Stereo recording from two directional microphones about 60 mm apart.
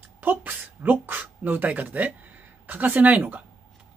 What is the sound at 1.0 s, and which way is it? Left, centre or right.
Speech, right.